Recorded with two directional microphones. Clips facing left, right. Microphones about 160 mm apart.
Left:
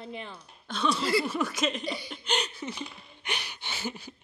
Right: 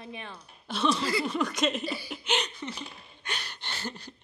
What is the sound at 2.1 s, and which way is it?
Laughter, 5° right (ahead or behind).